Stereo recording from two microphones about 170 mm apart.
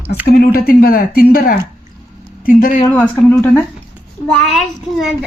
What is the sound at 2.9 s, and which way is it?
Speech, 10° left (ahead or behind).